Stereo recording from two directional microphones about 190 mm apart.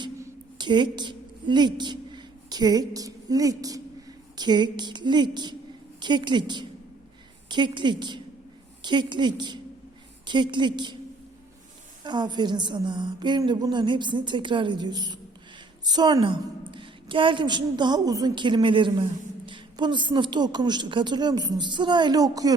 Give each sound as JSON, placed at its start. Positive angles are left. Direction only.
{"t": 0.6, "sound": "a woman's voice", "side_deg": -25}
{"t": 12.0, "sound": "a woman's voice", "side_deg": -25}